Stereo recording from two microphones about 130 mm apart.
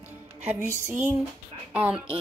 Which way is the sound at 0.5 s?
20° right (ahead or behind).